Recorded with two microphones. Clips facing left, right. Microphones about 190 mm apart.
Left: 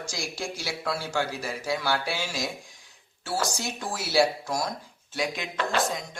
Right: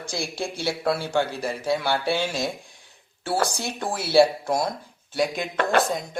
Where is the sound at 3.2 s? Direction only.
60° right (ahead or behind).